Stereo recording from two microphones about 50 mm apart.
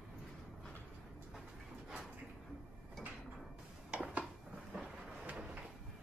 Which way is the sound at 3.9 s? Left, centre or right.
Right.